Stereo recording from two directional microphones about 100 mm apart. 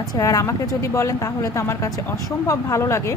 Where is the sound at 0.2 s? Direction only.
35° left (ahead or behind).